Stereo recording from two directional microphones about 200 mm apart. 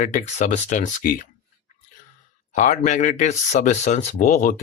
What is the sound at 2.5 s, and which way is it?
Speech, 40° left (ahead or behind).